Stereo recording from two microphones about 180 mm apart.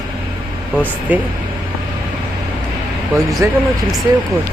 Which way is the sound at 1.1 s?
10° right (ahead or behind).